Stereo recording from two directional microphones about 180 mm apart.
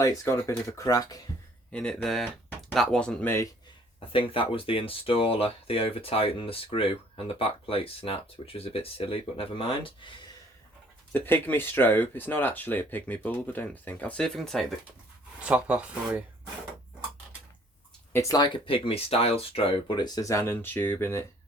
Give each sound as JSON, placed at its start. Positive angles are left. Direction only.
{"t": 0.0, "sound": "speech", "side_deg": 15}
{"t": 1.7, "sound": "speech", "side_deg": 5}
{"t": 4.1, "sound": "speech", "side_deg": 30}
{"t": 11.1, "sound": "speech", "side_deg": 10}
{"t": 18.1, "sound": "speech", "side_deg": 20}